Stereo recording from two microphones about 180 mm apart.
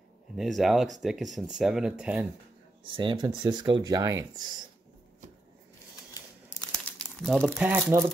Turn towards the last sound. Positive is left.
turn(degrees=-10)  # may be behind; listen again after turning